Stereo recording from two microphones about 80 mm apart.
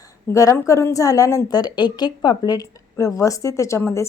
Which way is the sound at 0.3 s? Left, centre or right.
Left.